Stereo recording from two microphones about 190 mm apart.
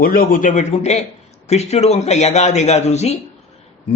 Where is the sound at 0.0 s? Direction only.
50° left (ahead or behind).